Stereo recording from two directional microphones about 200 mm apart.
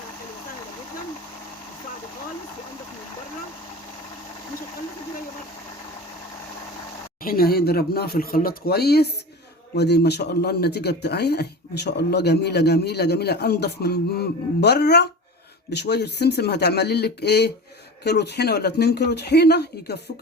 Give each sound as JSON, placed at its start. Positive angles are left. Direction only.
{"t": 7.3, "sound": "speech", "side_deg": 50}